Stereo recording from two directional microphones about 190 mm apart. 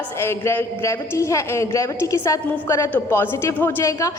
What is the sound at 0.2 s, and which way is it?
A woman's voice, 15° left (ahead or behind).